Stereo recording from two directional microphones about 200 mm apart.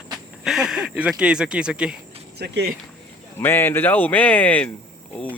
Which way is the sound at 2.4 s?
55° right (ahead or behind).